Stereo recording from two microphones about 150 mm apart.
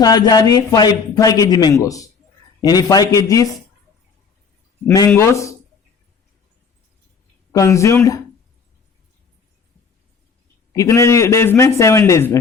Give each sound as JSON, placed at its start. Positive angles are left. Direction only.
{"t": 0.0, "sound": "speech", "side_deg": 25}
{"t": 5.0, "sound": "speech", "side_deg": 15}
{"t": 7.5, "sound": "speech", "side_deg": 20}
{"t": 10.7, "sound": "speech", "side_deg": 20}